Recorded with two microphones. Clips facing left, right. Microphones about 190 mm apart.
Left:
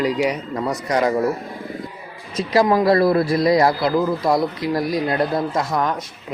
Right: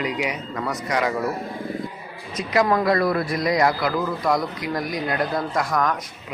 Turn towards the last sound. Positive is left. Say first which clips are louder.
# left 1 dB
turn(degrees=30)  # may be behind; listen again after turning